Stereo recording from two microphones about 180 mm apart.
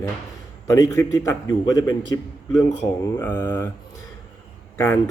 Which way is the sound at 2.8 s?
15° left (ahead or behind).